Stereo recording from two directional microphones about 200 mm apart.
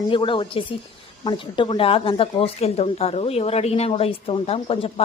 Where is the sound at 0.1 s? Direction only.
25° left (ahead or behind).